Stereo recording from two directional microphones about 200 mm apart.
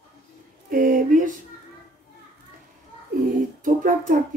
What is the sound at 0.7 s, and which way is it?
Speech, 45° right (ahead or behind).